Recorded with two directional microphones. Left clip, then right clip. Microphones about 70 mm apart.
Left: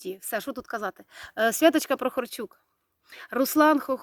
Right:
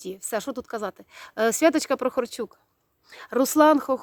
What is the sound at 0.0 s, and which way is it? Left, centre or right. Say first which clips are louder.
Speech: right 2 dB; right.